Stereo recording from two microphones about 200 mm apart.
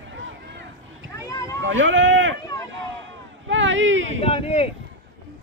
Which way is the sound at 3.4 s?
70° right (ahead or behind).